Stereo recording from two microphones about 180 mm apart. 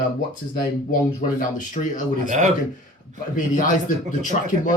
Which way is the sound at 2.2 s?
45° right (ahead or behind).